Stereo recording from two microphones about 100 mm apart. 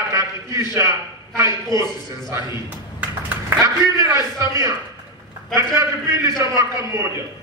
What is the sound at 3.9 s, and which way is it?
A man's voice, 35° right (ahead or behind).